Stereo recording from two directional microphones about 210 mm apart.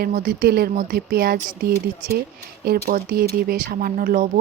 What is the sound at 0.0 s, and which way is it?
Speech, 40° right (ahead or behind).